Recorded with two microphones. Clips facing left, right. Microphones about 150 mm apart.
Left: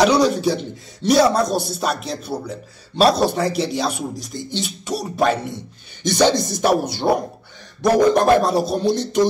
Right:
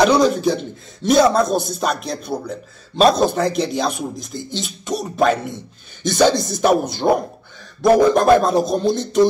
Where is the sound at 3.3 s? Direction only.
5° left (ahead or behind).